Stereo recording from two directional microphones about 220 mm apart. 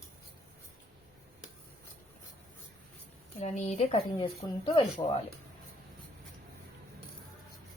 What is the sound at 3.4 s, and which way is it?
Speech, 30° left (ahead or behind).